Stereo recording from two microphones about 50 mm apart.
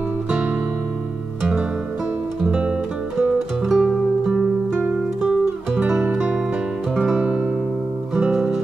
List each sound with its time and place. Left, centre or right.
3.6 s music: centre
7.2 s music: right
8.1 s music: centre